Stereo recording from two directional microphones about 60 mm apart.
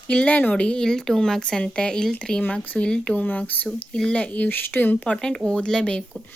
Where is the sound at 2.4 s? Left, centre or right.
Left.